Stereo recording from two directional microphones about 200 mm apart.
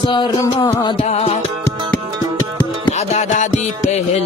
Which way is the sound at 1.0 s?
35° left (ahead or behind).